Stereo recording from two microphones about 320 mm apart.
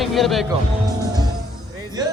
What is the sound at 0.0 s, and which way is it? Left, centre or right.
Speech, centre.